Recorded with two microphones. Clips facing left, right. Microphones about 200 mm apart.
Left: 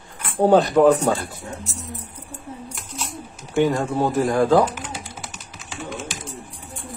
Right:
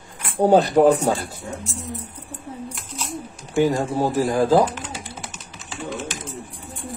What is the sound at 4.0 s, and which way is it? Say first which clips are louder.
Speech: left 1 dB; 30° right (ahead or behind).